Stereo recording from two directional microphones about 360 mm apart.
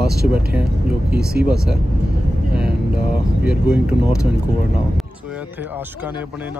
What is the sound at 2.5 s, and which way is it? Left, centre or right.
Vehicle, centre.